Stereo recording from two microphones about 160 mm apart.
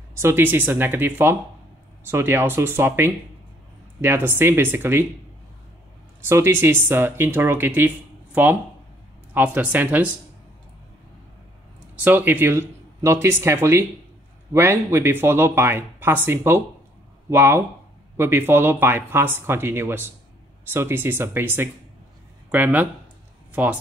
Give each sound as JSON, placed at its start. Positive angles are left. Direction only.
{"t": 0.1, "sound": "speech", "side_deg": -15}
{"t": 6.2, "sound": "speech", "side_deg": -15}
{"t": 12.0, "sound": "speech", "side_deg": -10}